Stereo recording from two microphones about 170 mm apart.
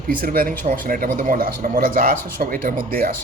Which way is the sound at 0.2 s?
55° right (ahead or behind).